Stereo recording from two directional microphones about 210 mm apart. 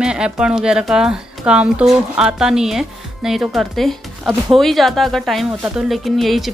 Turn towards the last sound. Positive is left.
turn(degrees=0)  # may be behind; listen again after turning